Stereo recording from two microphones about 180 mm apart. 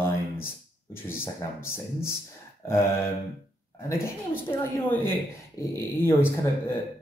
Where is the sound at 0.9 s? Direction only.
10° left (ahead or behind).